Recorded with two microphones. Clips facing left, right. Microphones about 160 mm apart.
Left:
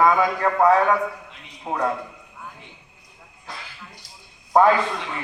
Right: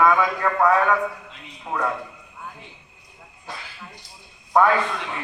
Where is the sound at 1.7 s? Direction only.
35° left (ahead or behind).